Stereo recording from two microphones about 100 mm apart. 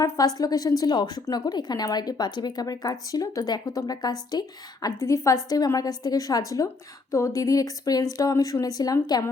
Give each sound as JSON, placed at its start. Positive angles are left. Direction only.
{"t": 0.3, "sound": "a woman's voice", "side_deg": 40}